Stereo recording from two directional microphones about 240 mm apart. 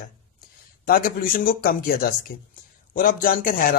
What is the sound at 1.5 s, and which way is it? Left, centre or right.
Speech, left.